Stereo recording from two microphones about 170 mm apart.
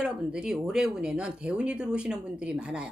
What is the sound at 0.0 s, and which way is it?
Speech, 5° right (ahead or behind).